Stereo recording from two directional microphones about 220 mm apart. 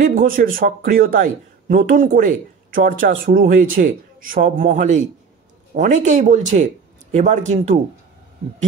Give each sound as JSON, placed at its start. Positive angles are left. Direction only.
{"t": 0.0, "sound": "a man's voice", "side_deg": -40}